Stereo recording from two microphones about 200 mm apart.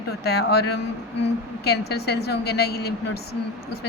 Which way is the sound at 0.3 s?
55° left (ahead or behind).